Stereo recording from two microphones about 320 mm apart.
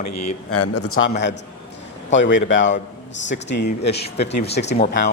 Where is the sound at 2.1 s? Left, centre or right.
Left.